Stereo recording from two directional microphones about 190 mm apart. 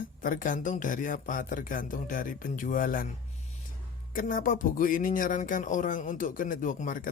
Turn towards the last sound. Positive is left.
turn(degrees=45)  # may be behind; listen again after turning